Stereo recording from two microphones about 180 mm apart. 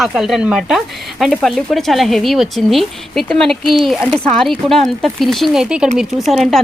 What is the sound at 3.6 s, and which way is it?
Speech, 30° right (ahead or behind).